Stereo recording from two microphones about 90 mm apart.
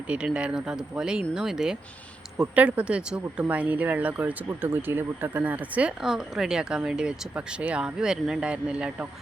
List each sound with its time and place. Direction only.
0.3 s speech: 10° right (ahead or behind)
6.0 s speech: 5° right (ahead or behind)